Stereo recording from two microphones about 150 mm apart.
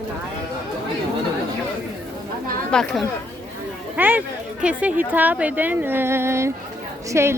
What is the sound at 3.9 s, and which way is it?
Speech, 10° right (ahead or behind).